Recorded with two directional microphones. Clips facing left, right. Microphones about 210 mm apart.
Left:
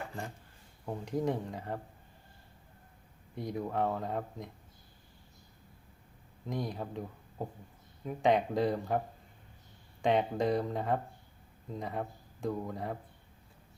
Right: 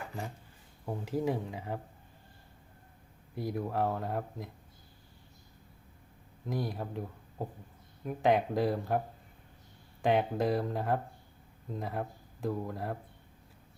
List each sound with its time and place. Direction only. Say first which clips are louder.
0.9 s speech: right 1 dB; 5° right (ahead or behind)
3.3 s speech: right 1 dB; centre (ahead or behind)
6.5 s speech: right 1 dB; 5° right (ahead or behind)
10.0 s speech: right 1 dB; 5° right (ahead or behind)